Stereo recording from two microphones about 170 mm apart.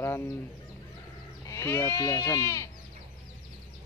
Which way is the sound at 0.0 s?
15° left (ahead or behind).